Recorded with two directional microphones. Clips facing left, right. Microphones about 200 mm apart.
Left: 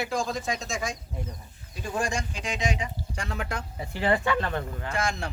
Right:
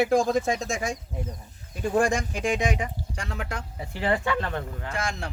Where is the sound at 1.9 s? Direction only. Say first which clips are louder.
Right 6 dB; 55° right (ahead or behind).